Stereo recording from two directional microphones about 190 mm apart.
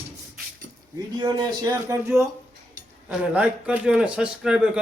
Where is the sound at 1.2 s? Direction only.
20° right (ahead or behind).